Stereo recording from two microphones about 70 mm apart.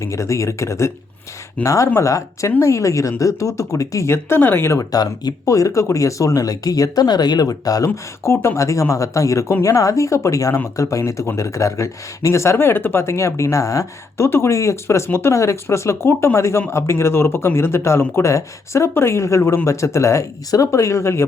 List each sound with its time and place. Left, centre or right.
0.0 s speech: left
4.8 s speech: left
8.2 s speech: left